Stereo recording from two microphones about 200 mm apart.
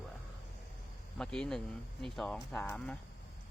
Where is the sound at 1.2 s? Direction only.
5° left (ahead or behind).